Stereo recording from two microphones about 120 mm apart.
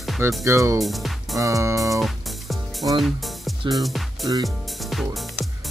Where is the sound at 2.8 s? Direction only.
35° right (ahead or behind).